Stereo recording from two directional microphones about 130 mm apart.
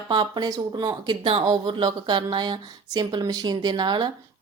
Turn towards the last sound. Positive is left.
turn(degrees=-35)  # may be behind; listen again after turning